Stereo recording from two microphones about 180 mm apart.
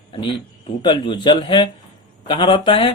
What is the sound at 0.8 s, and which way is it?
A man's voice, 25° left (ahead or behind).